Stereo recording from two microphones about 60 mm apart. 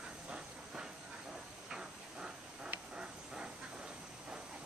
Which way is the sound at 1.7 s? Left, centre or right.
Centre.